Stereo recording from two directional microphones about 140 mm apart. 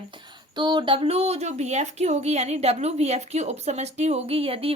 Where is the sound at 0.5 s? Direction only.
35° right (ahead or behind).